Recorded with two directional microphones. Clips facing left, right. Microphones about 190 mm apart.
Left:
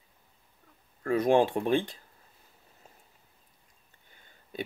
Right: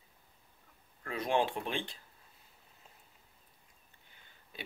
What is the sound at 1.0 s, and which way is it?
Speech, 45° left (ahead or behind).